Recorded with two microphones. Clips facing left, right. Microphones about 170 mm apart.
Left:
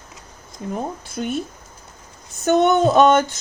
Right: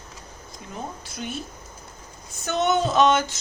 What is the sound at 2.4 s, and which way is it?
Speech, 55° left (ahead or behind).